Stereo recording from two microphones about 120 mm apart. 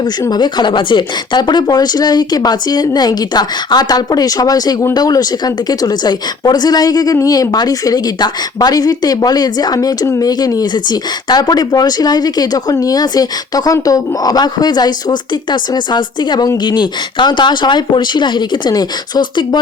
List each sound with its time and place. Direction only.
0.0 s a woman's voice: 35° left (ahead or behind)